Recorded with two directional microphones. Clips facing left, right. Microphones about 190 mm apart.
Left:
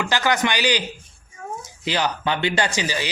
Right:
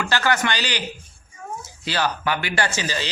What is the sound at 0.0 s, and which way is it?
Speech, 15° left (ahead or behind).